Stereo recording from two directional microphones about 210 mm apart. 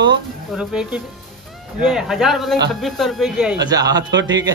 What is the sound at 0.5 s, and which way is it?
Speech, 5° right (ahead or behind).